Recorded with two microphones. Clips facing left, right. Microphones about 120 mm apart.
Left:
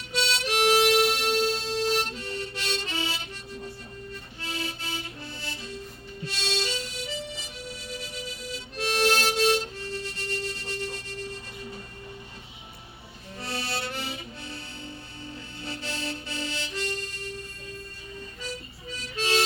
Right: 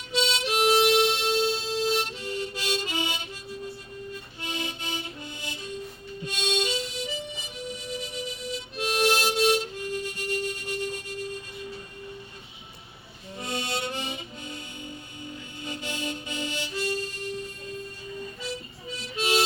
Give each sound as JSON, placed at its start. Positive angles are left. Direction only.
{"t": 0.1, "sound": "harmonica", "side_deg": -15}
{"t": 4.1, "sound": "music", "side_deg": -20}
{"t": 6.2, "sound": "harmonica", "side_deg": -15}
{"t": 13.3, "sound": "music", "side_deg": -20}
{"t": 18.9, "sound": "music", "side_deg": -15}